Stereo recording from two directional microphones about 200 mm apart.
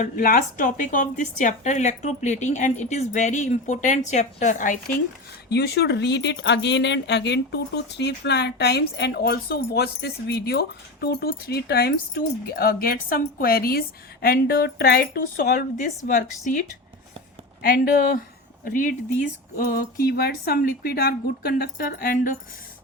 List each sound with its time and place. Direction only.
0.0 s speech: 45° left (ahead or behind)
5.5 s speech: 55° left (ahead or behind); by 16.3 s 40° left (ahead or behind)
17.6 s speech: 45° left (ahead or behind)